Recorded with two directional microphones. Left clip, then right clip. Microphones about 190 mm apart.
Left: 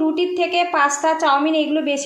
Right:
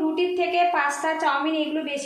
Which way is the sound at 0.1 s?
40° left (ahead or behind).